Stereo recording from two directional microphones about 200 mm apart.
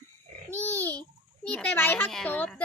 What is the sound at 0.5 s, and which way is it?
Babbling, 10° left (ahead or behind).